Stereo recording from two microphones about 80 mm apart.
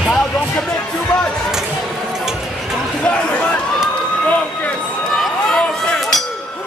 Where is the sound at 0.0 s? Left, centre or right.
Centre.